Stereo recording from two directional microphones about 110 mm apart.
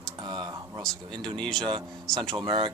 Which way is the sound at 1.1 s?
45° right (ahead or behind).